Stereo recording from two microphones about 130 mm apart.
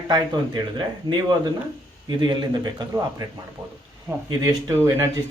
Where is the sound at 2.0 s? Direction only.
35° right (ahead or behind).